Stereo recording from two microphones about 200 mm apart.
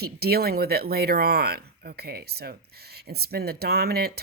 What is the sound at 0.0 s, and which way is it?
Speech, 50° right (ahead or behind).